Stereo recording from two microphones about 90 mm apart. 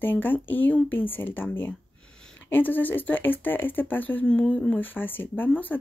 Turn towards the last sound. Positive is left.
turn(degrees=15)  # may be behind; listen again after turning